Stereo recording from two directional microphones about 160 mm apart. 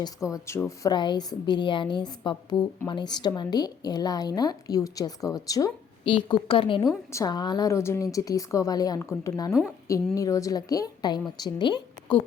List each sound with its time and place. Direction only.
0.0 s a woman's voice: 20° left (ahead or behind)
6.1 s a woman's voice: 35° left (ahead or behind)
6.8 s a woman's voice: 20° left (ahead or behind)